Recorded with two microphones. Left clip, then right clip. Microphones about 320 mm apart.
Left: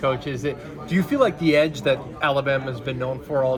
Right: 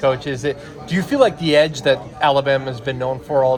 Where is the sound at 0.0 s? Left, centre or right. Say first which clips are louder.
Right 5 dB; right.